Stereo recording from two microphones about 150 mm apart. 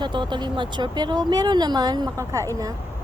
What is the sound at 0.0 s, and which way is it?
Speech, 30° right (ahead or behind).